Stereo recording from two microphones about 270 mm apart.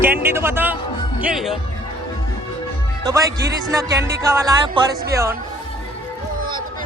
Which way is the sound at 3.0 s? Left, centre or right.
Centre.